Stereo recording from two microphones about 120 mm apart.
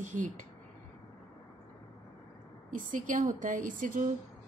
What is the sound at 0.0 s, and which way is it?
Speech, 90° right.